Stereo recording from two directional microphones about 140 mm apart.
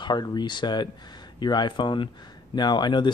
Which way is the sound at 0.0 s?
30° left (ahead or behind).